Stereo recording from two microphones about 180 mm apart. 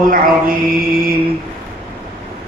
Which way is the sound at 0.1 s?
50° right (ahead or behind).